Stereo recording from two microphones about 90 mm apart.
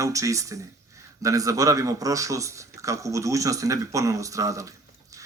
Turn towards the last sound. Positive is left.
turn(degrees=-35)  # may be behind; listen again after turning